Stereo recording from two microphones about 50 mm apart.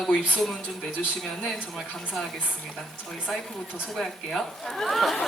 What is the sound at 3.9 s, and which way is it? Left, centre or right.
Speech, centre.